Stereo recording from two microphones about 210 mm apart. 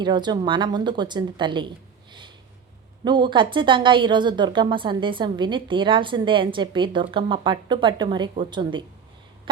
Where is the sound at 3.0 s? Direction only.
20° right (ahead or behind).